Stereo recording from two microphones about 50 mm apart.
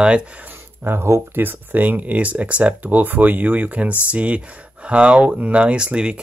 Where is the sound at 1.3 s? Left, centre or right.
Right.